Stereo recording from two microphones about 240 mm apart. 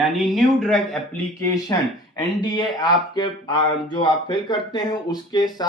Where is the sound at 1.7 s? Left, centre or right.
Centre.